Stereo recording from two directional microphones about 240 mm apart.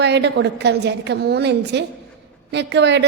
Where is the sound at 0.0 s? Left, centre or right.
Right.